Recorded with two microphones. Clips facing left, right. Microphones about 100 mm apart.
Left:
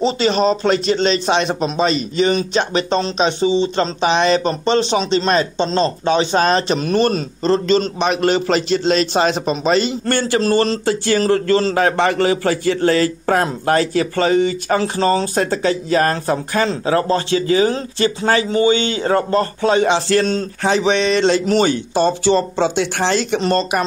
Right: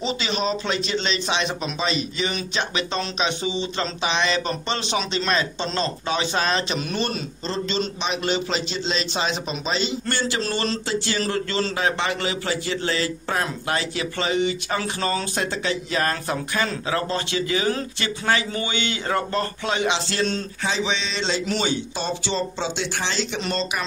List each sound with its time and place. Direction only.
0.0 s speech: 40° left (ahead or behind)
20.6 s speech: 55° left (ahead or behind)